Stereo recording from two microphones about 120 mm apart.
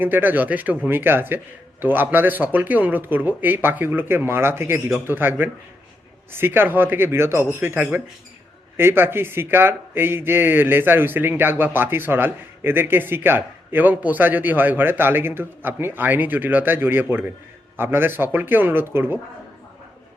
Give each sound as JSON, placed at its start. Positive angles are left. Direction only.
{"t": 0.0, "sound": "speech", "side_deg": -15}